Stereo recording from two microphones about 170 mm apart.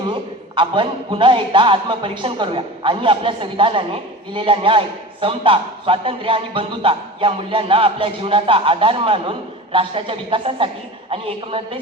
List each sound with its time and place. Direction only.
0.0 s a man's voice: 30° right (ahead or behind)